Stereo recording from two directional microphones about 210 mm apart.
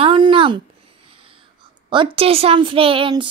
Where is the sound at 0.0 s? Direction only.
25° right (ahead or behind).